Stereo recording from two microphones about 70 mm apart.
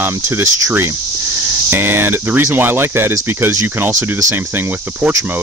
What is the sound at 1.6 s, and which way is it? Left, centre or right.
Speech, right.